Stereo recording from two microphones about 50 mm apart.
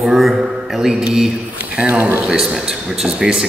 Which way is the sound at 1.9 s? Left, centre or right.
Right.